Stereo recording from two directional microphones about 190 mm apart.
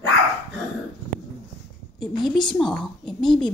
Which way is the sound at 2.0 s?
Centre (ahead or behind).